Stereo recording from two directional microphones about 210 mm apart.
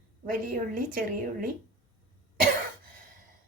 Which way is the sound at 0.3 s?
40° right (ahead or behind).